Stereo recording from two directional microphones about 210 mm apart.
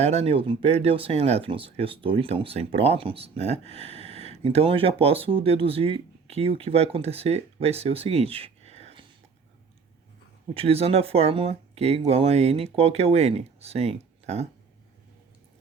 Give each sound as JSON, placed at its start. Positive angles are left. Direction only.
{"t": 0.0, "sound": "speech", "side_deg": -30}
{"t": 10.5, "sound": "speech", "side_deg": -25}